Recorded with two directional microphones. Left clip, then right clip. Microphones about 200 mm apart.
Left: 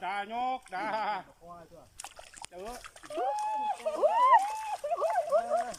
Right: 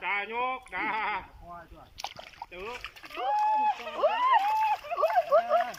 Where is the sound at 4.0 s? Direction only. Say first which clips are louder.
Left 2 dB; 20° left (ahead or behind).